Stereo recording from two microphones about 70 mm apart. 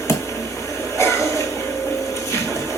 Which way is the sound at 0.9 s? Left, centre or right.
Left.